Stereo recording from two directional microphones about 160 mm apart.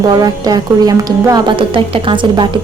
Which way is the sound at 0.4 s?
25° right (ahead or behind).